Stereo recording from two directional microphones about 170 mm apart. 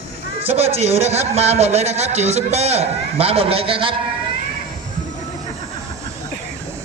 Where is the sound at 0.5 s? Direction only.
35° right (ahead or behind).